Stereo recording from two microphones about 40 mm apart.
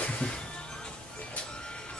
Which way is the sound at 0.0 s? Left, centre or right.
Left.